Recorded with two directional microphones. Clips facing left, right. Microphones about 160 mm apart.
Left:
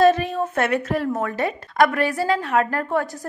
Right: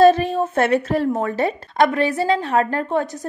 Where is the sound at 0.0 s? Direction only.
30° right (ahead or behind).